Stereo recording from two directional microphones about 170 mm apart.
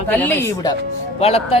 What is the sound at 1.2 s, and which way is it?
Speech, 35° left (ahead or behind).